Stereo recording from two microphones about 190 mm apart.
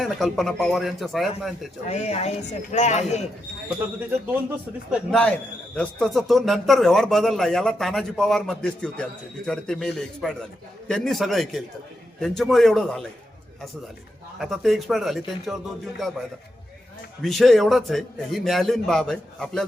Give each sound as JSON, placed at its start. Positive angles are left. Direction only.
{"t": 0.0, "sound": "speech", "side_deg": 0}
{"t": 1.9, "sound": "speech", "side_deg": 35}
{"t": 4.9, "sound": "speech", "side_deg": 5}
{"t": 14.3, "sound": "speech", "side_deg": 0}
{"t": 17.2, "sound": "speech", "side_deg": 0}